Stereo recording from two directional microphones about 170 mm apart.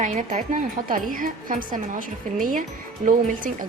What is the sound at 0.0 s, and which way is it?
Speech, 45° right (ahead or behind).